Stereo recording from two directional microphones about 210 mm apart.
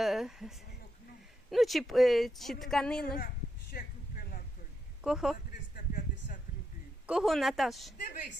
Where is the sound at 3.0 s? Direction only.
45° left (ahead or behind).